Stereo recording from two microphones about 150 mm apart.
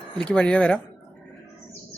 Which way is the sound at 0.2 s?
5° left (ahead or behind).